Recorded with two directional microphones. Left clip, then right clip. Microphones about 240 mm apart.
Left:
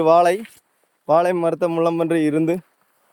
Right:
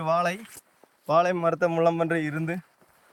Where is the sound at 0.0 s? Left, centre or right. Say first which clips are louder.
Left 11 dB; left.